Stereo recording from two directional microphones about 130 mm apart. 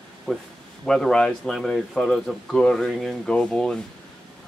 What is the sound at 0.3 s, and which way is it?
Speech, 10° left (ahead or behind).